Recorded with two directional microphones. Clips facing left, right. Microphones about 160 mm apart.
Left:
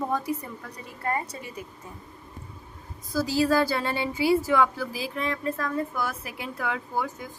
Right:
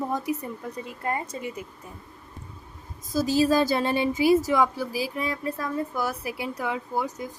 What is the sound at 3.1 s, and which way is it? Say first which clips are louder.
A woman's voice: right 2 dB; 20° right (ahead or behind).